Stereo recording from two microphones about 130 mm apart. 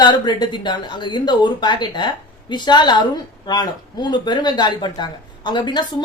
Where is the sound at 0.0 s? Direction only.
35° left (ahead or behind).